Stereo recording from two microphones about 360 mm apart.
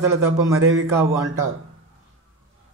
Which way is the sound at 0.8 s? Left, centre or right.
Centre.